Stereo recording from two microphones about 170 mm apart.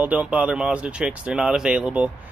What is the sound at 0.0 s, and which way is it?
Speech, 10° right (ahead or behind).